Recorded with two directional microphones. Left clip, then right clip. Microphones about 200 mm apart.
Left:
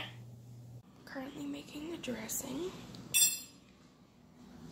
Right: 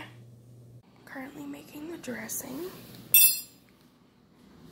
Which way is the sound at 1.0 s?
15° right (ahead or behind).